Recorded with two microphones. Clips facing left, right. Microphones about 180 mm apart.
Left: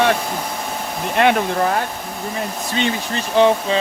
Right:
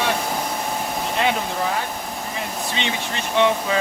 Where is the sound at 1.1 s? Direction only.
60° left (ahead or behind).